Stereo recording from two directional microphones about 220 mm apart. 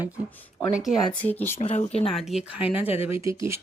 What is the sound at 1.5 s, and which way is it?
Speech, 30° left (ahead or behind).